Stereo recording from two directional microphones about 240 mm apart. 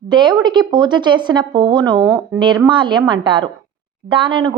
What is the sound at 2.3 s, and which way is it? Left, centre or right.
A woman's voice, centre.